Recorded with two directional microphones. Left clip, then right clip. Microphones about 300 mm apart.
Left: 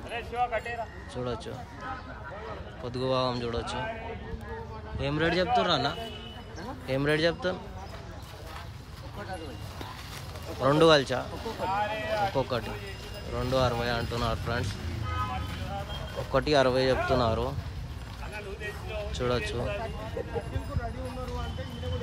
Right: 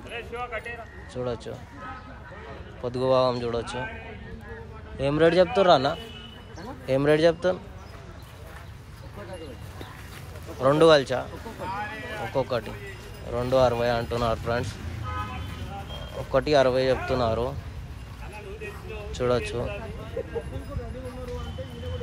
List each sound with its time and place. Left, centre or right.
0.1 s speech: left
1.1 s speech: centre
2.8 s speech: centre
4.9 s speech: centre
10.6 s speech: centre
11.6 s speech: left
12.4 s speech: centre
16.3 s speech: centre
19.1 s speech: centre